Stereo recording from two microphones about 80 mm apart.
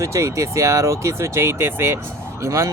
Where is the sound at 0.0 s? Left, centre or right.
Right.